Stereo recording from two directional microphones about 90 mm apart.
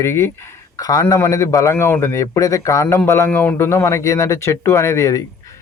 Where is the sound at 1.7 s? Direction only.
25° left (ahead or behind).